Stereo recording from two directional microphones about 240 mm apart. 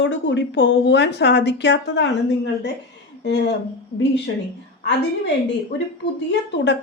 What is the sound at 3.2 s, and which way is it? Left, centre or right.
Speech, left.